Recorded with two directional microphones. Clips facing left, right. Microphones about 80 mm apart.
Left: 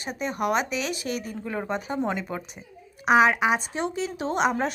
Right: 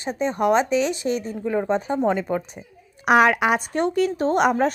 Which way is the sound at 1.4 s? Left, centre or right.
Centre.